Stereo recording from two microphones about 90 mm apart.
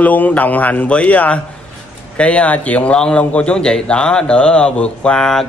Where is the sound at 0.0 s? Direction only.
15° left (ahead or behind).